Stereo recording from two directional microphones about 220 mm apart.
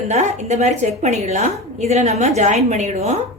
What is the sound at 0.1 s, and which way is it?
A woman's voice, 30° right (ahead or behind).